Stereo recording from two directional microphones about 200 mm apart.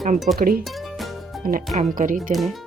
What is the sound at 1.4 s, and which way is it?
Speech, 45° right (ahead or behind).